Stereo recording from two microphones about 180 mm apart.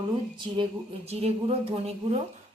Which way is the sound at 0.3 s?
25° right (ahead or behind).